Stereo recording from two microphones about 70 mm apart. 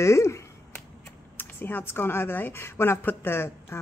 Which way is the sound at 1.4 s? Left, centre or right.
Left.